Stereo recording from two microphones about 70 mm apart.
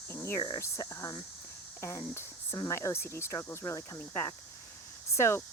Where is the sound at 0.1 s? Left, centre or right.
Left.